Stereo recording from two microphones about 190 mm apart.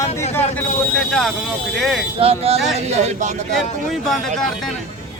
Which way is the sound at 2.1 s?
30° right (ahead or behind).